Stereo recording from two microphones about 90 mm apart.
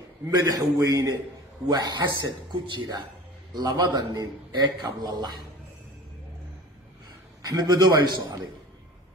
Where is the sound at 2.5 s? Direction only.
60° right (ahead or behind).